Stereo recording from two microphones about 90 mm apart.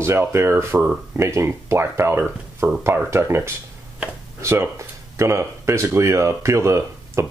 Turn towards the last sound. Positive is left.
turn(degrees=-35)  # may be behind; listen again after turning